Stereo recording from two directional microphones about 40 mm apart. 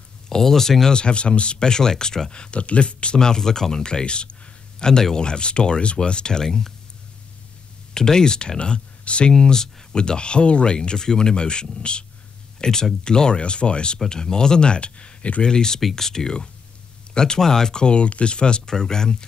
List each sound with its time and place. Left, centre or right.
0.3 s speech: centre
0.9 s speech: left
3.2 s speech: centre
3.8 s a sound: left
5.1 s speech: left
7.9 s speech: centre
9.3 s speech: centre; by 15.4 s left
15.4 s speech: centre